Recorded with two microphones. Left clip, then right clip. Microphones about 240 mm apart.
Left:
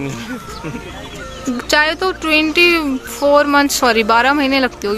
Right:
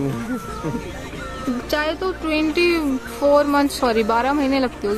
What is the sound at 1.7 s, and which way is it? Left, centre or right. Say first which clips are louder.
Speech: left 8 dB; centre.